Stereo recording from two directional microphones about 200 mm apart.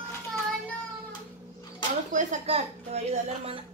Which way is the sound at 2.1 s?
30° right (ahead or behind).